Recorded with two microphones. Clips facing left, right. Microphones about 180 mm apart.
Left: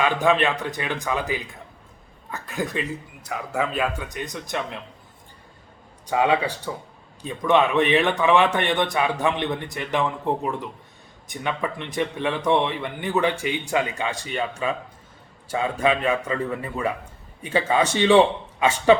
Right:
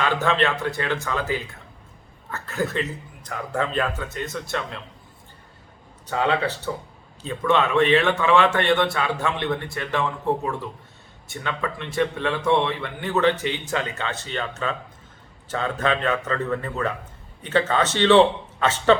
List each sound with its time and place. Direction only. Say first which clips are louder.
0.0 s a man's voice: left 2 dB; 15° left (ahead or behind)
6.1 s a man's voice: left 2 dB; 15° left (ahead or behind)